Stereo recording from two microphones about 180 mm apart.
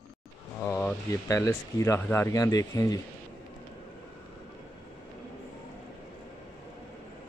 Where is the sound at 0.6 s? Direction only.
10° left (ahead or behind).